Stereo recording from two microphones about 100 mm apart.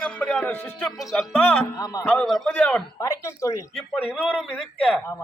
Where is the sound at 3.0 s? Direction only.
30° left (ahead or behind).